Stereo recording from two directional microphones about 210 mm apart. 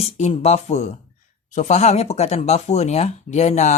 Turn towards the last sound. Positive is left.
turn(degrees=35)  # may be behind; listen again after turning